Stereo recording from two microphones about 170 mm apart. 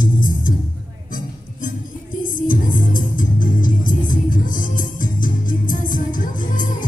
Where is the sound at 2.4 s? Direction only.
55° left (ahead or behind).